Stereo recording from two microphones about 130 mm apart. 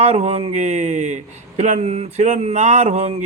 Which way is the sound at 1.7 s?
50° right (ahead or behind).